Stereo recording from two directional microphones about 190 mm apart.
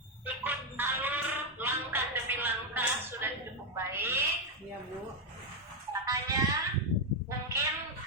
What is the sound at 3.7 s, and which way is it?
Owl, 10° right (ahead or behind).